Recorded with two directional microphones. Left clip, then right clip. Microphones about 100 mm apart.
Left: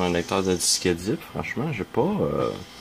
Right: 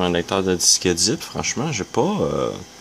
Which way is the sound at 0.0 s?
10° right (ahead or behind).